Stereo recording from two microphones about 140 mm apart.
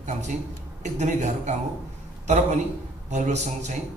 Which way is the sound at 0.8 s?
60° right (ahead or behind).